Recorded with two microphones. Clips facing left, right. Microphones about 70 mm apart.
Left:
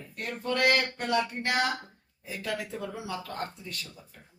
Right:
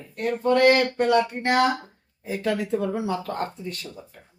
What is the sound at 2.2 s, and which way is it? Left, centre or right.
Speech, right.